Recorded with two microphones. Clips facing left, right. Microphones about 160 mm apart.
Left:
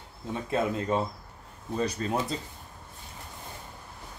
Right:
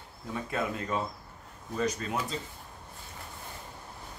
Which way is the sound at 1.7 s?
30° left (ahead or behind).